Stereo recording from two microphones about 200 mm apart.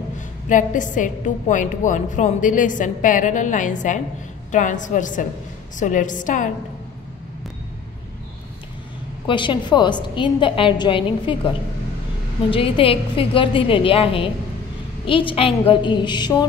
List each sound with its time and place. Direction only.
0.5 s a woman's voice: 40° left (ahead or behind)
9.2 s a woman's voice: 25° left (ahead or behind)